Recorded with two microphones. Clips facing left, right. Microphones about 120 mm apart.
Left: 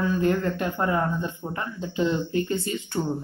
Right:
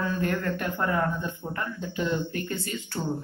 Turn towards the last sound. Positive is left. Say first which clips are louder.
# left 5 dB
turn(degrees=20)  # may be behind; listen again after turning